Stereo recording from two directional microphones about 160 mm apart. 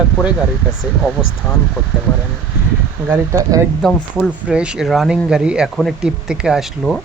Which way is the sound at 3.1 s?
15° right (ahead or behind).